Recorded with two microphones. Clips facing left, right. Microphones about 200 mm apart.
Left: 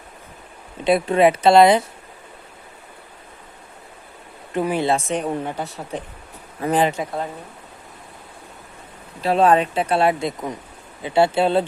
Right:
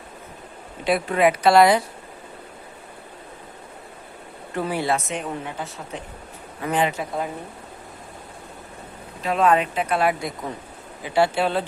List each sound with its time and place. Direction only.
0.9 s speech: 25° left (ahead or behind)
4.5 s speech: 20° left (ahead or behind); by 6.9 s 35° left (ahead or behind)
9.2 s speech: 30° left (ahead or behind)